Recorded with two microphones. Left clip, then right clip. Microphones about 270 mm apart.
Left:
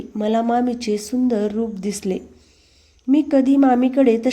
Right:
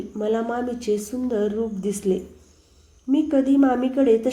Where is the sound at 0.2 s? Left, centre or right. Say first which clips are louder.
Left 5 dB; left.